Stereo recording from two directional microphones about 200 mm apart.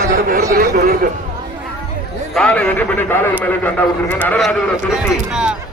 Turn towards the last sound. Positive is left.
turn(degrees=-5)  # may be behind; listen again after turning